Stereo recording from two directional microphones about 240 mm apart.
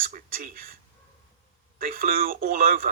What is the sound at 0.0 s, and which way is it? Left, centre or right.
Speech, right.